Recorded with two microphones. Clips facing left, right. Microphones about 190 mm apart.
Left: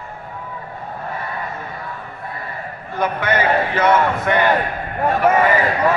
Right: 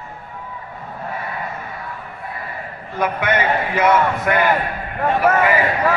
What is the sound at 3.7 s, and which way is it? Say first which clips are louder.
Speech: right 2 dB; centre (ahead or behind).